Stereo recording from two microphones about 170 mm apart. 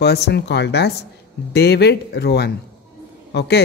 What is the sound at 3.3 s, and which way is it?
Speech, 90° left.